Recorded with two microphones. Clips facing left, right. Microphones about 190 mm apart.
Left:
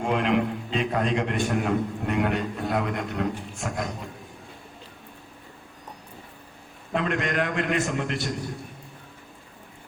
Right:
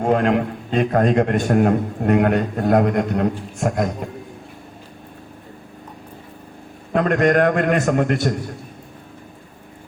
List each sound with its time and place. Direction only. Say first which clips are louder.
0.0 s a man's voice: right 6 dB; 45° right (ahead or behind)
6.9 s a man's voice: right 10 dB; 45° right (ahead or behind)